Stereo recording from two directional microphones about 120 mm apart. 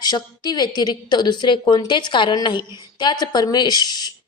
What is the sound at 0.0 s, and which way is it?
A woman's voice, 35° left (ahead or behind).